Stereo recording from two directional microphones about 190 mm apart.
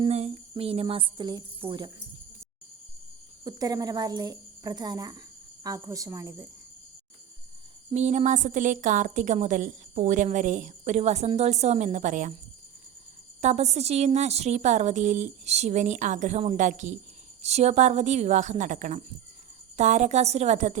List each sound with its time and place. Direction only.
0.0 s speech: 35° right (ahead or behind)
3.4 s speech: 20° right (ahead or behind)
7.9 s a woman's voice: 35° right (ahead or behind)
13.4 s a woman's voice: 35° right (ahead or behind)